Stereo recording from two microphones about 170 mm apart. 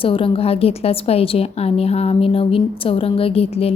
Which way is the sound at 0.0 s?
30° left (ahead or behind).